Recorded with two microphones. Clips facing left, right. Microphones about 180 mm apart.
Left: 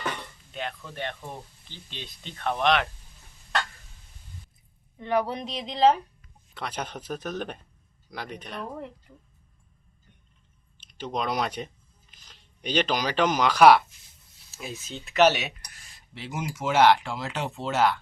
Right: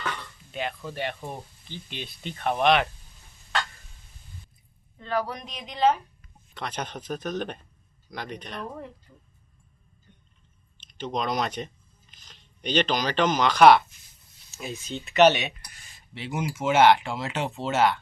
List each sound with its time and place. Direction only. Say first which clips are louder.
0.0 s dishes: left 1 dB; 20° left (ahead or behind)
1.9 s speech: right 4 dB; 10° right (ahead or behind)
4.9 s speech: left 3 dB; 20° left (ahead or behind)
6.5 s speech: even; 5° left (ahead or behind)
10.8 s speech: right 1 dB; 10° left (ahead or behind)